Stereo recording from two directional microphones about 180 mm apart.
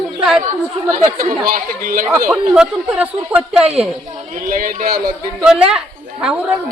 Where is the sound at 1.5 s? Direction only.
50° right (ahead or behind).